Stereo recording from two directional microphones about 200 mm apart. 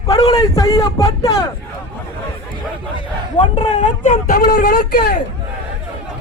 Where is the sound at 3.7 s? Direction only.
35° left (ahead or behind).